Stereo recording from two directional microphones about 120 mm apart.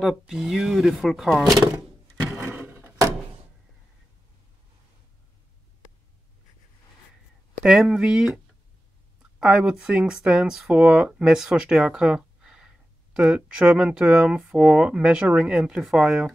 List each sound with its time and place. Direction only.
0.0 s speech: centre (ahead or behind)
1.8 s a sound: 20° right (ahead or behind)
7.6 s speech: 5° right (ahead or behind)
9.4 s speech: 5° right (ahead or behind)